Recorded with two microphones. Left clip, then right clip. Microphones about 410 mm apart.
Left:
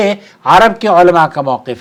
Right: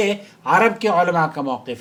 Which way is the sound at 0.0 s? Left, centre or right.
Left.